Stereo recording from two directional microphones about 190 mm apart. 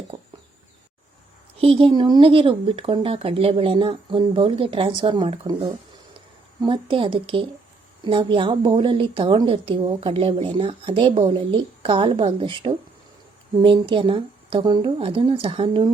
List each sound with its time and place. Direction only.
1.5 s a woman's voice: 30° right (ahead or behind)